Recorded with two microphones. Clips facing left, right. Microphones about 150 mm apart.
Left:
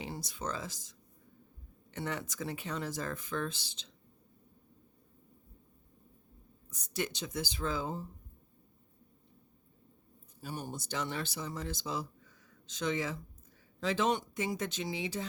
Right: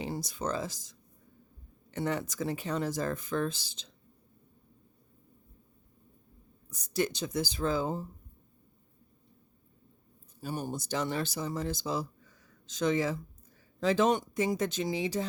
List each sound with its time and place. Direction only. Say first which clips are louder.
0.0 s speech: right 5 dB; 40° right (ahead or behind)
6.7 s speech: right 6 dB; 35° right (ahead or behind)
10.4 s speech: right 5 dB; 40° right (ahead or behind)